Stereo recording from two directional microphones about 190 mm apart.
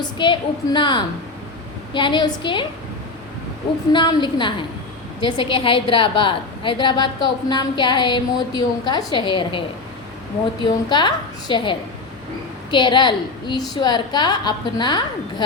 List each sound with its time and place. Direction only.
0.0 s a woman's voice: 25° left (ahead or behind)
3.9 s a woman's voice: 25° left (ahead or behind)